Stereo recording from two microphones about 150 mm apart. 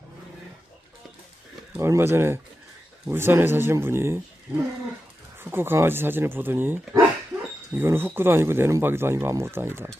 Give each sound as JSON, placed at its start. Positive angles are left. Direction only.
{"t": 1.7, "sound": "speech", "side_deg": -15}
{"t": 5.4, "sound": "speech", "side_deg": -15}